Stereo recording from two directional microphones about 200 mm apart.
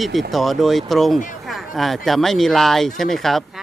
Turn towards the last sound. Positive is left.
turn(degrees=0)  # may be behind; listen again after turning